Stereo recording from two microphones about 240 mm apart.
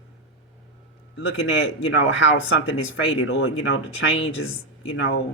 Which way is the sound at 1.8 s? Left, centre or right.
Left.